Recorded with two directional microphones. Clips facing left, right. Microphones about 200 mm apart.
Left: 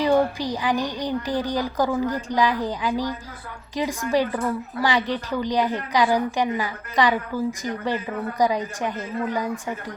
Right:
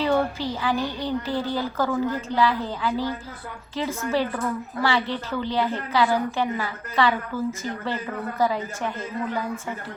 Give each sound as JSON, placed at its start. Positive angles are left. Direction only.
{"t": 0.0, "sound": "a woman's voice", "side_deg": 15}